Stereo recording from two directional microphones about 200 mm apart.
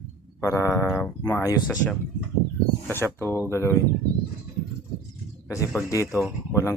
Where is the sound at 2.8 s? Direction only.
10° left (ahead or behind).